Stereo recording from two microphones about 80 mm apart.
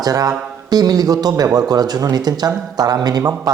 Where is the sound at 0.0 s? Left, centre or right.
Right.